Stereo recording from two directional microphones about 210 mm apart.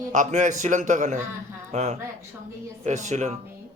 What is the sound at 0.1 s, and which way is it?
A man's voice, 35° right (ahead or behind).